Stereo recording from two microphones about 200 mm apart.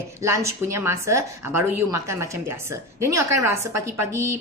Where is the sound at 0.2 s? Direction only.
15° right (ahead or behind).